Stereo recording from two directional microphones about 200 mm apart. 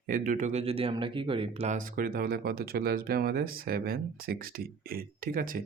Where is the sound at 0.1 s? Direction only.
40° right (ahead or behind).